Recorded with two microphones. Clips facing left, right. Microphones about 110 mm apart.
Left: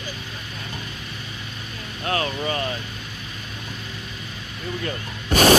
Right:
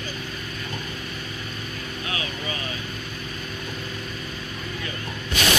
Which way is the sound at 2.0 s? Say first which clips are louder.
Left 9 dB; 45° left (ahead or behind).